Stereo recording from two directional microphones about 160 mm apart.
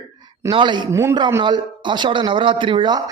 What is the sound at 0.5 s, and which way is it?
A man's voice, 30° right (ahead or behind).